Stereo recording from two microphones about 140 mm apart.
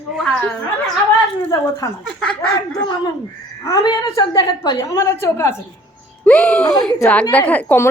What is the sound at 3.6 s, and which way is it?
A woman's voice, 25° left (ahead or behind).